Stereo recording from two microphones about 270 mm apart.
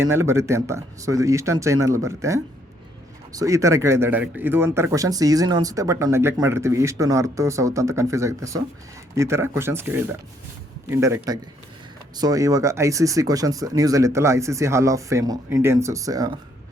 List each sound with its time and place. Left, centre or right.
0.0 s speech: centre